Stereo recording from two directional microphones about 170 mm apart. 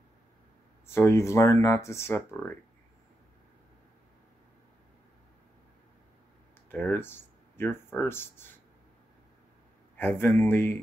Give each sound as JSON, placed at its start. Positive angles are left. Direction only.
{"t": 0.8, "sound": "speech", "side_deg": 15}
{"t": 6.7, "sound": "speech", "side_deg": 10}
{"t": 9.9, "sound": "speech", "side_deg": 10}